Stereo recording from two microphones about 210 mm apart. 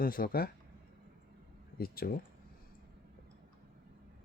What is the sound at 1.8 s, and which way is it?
Speech, 45° left (ahead or behind).